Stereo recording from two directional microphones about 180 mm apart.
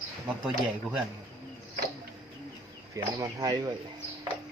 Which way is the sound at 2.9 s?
20° right (ahead or behind).